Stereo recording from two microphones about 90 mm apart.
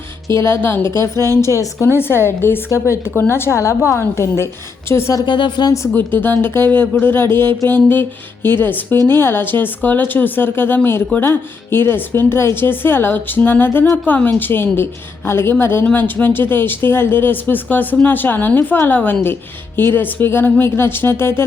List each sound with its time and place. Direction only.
0.3 s a woman's voice: 30° left (ahead or behind)
5.2 s speech: 60° left (ahead or behind)
5.9 s speech: 20° left (ahead or behind)